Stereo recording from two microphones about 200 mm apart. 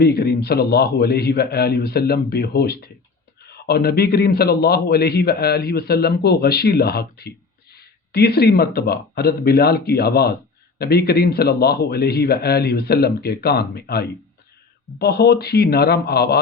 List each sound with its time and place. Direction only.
0.0 s a man's voice: 50° left (ahead or behind)